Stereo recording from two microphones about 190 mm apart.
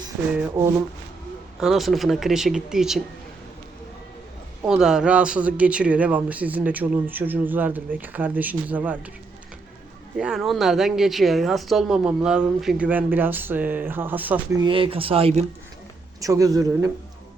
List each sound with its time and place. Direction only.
0.3 s speech: 10° right (ahead or behind)
1.6 s a woman's voice: centre (ahead or behind)
4.6 s speech: 5° right (ahead or behind)
10.2 s a woman's voice: 5° right (ahead or behind)
14.6 s speech: 30° right (ahead or behind)
16.2 s speech: 15° right (ahead or behind)